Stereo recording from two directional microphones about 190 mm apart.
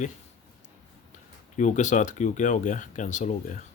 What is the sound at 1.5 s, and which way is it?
Speech, 40° left (ahead or behind).